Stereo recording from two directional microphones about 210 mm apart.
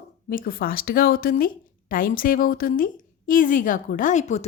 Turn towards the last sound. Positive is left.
turn(degrees=35)  # may be behind; listen again after turning